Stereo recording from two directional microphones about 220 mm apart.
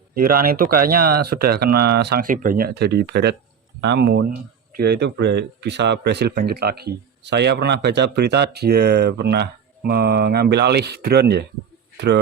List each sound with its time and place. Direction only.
0.1 s speech: 40° right (ahead or behind)